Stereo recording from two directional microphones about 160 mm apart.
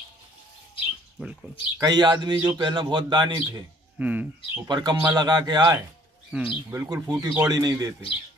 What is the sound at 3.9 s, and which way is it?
Speech, 10° right (ahead or behind).